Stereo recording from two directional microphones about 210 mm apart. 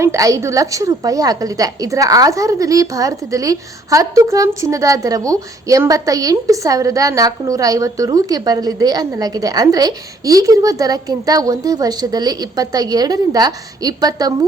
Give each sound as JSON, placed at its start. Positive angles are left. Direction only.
{"t": 0.0, "sound": "a woman's voice", "side_deg": -15}